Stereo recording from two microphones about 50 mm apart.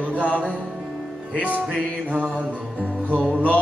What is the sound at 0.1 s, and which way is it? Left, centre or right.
Music, left.